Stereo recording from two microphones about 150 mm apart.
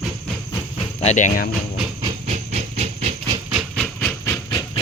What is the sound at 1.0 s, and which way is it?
Speech, 50° left (ahead or behind).